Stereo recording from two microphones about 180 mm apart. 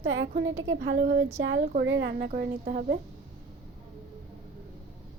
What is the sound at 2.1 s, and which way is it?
Speech, 55° right (ahead or behind).